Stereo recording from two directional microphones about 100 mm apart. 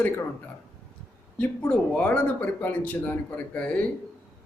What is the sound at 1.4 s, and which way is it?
Speech, 10° left (ahead or behind).